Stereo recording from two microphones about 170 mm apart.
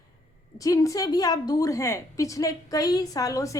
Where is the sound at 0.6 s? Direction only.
20° left (ahead or behind).